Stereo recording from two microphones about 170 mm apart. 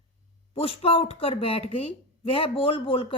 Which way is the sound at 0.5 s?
35° left (ahead or behind).